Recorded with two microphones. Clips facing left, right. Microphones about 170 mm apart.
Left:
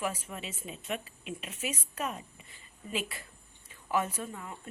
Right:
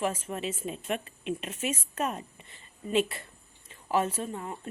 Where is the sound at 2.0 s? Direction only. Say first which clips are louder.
Right 4 dB; 50° right (ahead or behind).